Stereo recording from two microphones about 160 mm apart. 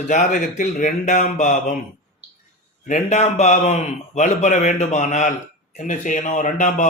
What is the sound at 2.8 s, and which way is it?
A man's voice, 50° left (ahead or behind).